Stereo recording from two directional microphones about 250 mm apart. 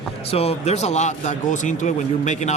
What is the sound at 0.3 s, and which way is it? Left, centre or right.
Speech, left.